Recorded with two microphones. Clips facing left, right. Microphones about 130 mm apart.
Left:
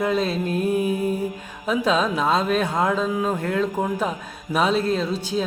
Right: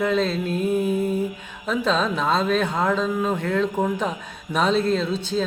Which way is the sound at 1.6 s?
10° left (ahead or behind).